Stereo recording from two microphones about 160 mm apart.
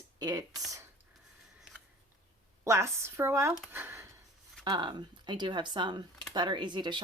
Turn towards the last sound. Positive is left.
turn(degrees=-30)  # may be behind; listen again after turning